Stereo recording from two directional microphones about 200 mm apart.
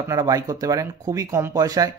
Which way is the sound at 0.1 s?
15° right (ahead or behind).